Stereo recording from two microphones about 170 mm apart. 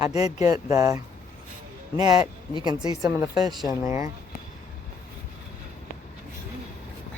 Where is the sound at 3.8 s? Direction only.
15° right (ahead or behind).